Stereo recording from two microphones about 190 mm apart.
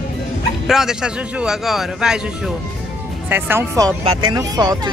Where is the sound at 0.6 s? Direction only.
Centre (ahead or behind).